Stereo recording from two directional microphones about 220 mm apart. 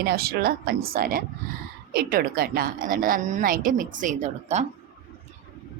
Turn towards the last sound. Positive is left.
turn(degrees=-30)  # may be behind; listen again after turning